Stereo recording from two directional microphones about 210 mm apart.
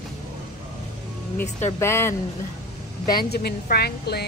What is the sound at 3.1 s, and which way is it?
A woman's voice, 45° left (ahead or behind).